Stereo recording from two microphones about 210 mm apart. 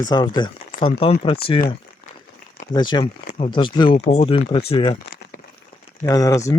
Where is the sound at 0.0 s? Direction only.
20° left (ahead or behind).